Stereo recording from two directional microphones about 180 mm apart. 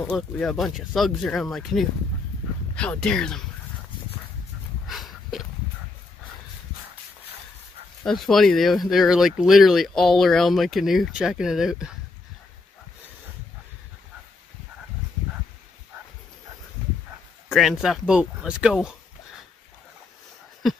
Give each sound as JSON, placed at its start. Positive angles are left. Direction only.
{"t": 0.1, "sound": "speech", "side_deg": 0}
{"t": 4.8, "sound": "a sound", "side_deg": 0}
{"t": 8.0, "sound": "speech", "side_deg": 0}
{"t": 17.6, "sound": "speech", "side_deg": 0}
{"t": 20.6, "sound": "speech", "side_deg": 0}